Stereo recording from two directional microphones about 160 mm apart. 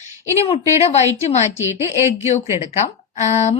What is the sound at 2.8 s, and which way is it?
Speech, 45° left (ahead or behind).